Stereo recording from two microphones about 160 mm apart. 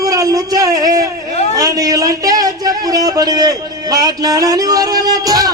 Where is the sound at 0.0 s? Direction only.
20° right (ahead or behind).